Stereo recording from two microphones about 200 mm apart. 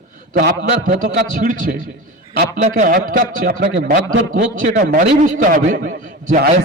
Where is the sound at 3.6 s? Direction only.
60° right (ahead or behind).